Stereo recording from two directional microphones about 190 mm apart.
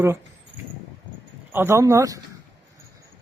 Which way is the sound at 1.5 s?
10° right (ahead or behind).